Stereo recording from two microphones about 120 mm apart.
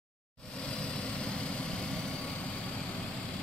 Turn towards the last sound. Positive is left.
turn(degrees=10)  # may be behind; listen again after turning